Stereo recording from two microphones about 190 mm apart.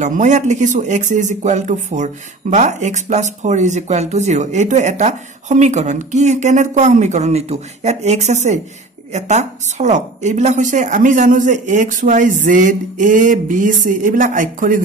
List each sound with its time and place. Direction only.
0.0 s a woman's voice: 40° right (ahead or behind)